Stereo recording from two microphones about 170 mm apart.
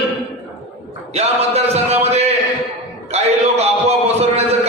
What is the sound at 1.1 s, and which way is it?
Music, 40° right (ahead or behind).